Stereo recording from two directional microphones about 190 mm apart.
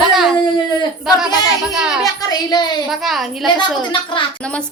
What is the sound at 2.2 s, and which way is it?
Speech, 20° left (ahead or behind).